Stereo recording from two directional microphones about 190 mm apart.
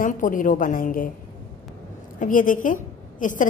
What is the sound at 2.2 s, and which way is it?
A woman's voice, 45° left (ahead or behind).